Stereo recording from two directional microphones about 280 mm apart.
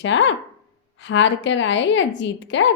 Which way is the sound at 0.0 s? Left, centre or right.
Left.